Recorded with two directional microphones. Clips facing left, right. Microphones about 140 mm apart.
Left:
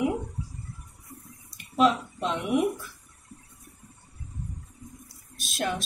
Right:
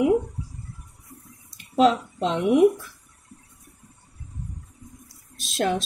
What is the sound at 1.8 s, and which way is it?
Speech, 90° right.